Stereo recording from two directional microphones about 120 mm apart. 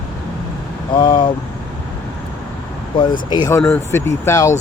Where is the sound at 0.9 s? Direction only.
45° left (ahead or behind).